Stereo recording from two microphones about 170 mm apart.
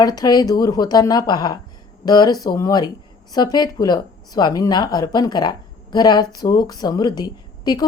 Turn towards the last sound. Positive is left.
turn(degrees=25)  # may be behind; listen again after turning